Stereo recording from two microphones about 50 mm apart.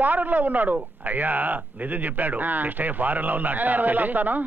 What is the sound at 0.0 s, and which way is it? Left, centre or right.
Speech, right.